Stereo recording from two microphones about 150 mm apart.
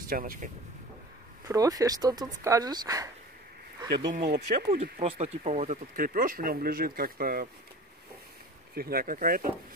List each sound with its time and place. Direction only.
0.1 s speech: 65° right (ahead or behind)
1.5 s speech: 25° right (ahead or behind)
4.1 s speech: 70° right (ahead or behind)
5.0 s speech: 40° right (ahead or behind)
5.9 s speech: 70° right (ahead or behind)
8.7 s speech: 85° right; by 9.5 s 70° right (ahead or behind)